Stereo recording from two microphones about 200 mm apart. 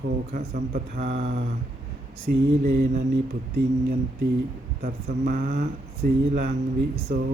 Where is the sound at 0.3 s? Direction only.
45° right (ahead or behind).